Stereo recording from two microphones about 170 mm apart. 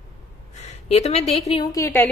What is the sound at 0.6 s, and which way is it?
Speech, 40° left (ahead or behind).